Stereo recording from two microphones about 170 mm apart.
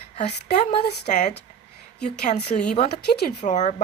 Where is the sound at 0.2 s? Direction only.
45° left (ahead or behind).